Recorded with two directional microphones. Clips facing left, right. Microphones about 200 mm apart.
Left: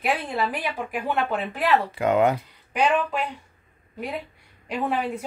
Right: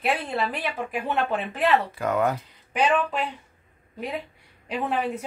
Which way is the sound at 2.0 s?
20° left (ahead or behind).